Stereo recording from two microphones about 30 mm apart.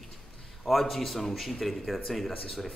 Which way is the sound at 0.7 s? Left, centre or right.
Centre.